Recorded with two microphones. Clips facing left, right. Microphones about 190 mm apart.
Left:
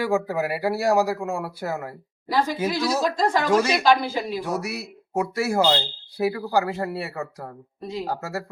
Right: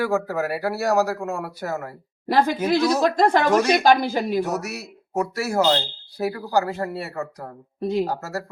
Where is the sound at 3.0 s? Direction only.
55° right (ahead or behind).